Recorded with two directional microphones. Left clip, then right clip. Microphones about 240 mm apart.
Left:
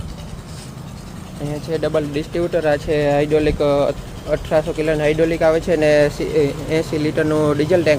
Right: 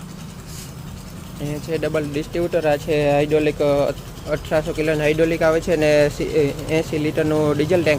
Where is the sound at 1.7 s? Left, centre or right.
Centre.